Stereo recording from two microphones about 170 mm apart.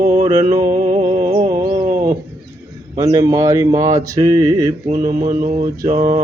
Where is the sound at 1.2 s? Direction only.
40° right (ahead or behind).